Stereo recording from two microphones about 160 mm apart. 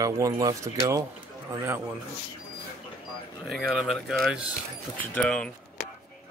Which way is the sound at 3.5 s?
Centre (ahead or behind).